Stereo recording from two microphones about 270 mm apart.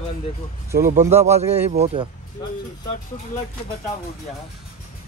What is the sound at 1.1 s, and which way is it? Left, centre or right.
A man's voice, right.